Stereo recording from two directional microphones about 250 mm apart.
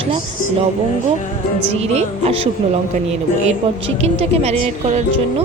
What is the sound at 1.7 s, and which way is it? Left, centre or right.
Speech, right.